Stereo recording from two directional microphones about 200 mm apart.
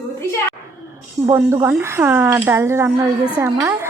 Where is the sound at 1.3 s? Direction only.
15° right (ahead or behind).